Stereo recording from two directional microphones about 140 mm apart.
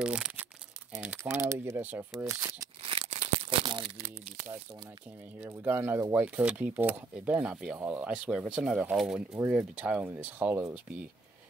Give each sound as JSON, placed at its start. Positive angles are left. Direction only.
{"t": 0.0, "sound": "crumpling", "side_deg": -10}
{"t": 1.0, "sound": "speech", "side_deg": -15}
{"t": 2.1, "sound": "speech", "side_deg": -25}
{"t": 2.8, "sound": "tearing", "side_deg": -40}
{"t": 3.1, "sound": "a sound", "side_deg": -50}
{"t": 5.4, "sound": "speech", "side_deg": -15}